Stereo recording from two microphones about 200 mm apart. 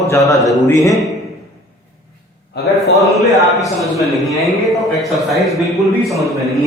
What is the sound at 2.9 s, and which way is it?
A man's voice, centre (ahead or behind).